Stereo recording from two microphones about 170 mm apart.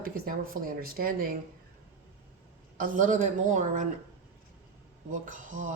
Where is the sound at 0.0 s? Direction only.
60° right (ahead or behind).